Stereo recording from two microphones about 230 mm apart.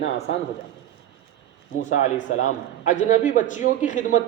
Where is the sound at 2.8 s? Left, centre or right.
Left.